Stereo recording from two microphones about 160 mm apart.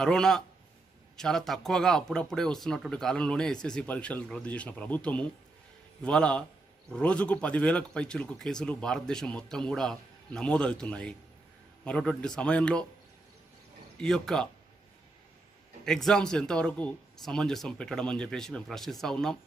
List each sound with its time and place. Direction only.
0.0 s speech: 5° left (ahead or behind)
13.9 s speech: 5° left (ahead or behind)
15.8 s speech: 5° left (ahead or behind)